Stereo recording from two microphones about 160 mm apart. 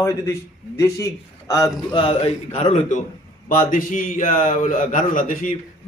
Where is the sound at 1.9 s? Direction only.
35° left (ahead or behind).